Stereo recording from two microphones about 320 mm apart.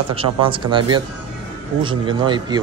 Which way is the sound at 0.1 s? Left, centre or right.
Centre.